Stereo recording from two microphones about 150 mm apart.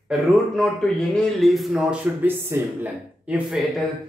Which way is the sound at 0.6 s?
5° left (ahead or behind).